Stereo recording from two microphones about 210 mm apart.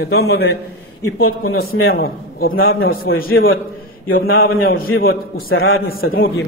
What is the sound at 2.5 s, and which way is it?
Speech, 70° left (ahead or behind).